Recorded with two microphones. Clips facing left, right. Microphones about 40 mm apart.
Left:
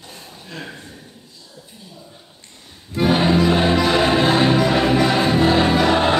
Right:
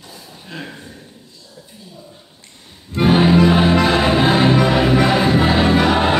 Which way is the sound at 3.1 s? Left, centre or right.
Centre.